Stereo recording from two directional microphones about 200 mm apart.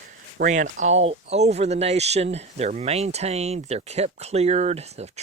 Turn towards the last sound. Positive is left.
turn(degrees=-35)  # may be behind; listen again after turning